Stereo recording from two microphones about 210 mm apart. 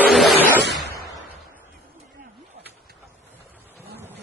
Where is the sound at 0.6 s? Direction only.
55° right (ahead or behind).